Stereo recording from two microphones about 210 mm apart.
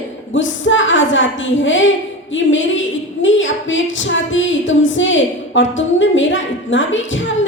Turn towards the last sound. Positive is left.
turn(degrees=65)  # may be behind; listen again after turning